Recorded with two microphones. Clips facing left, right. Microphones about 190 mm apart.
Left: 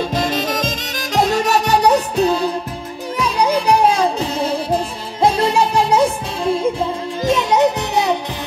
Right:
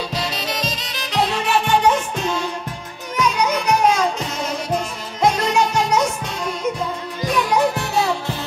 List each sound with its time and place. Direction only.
0.0 s music: 50° left (ahead or behind); by 8.4 s 20° left (ahead or behind)